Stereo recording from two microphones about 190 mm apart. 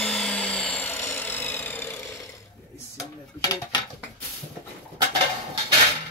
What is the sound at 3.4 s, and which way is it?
Dishes, 20° left (ahead or behind).